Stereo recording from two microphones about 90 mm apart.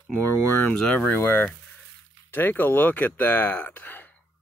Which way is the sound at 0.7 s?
10° left (ahead or behind).